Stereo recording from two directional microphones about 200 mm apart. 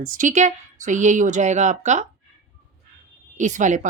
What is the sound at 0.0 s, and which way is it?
A woman's voice, 40° right (ahead or behind).